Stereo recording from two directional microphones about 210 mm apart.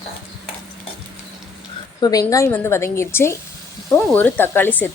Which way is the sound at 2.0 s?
15° left (ahead or behind).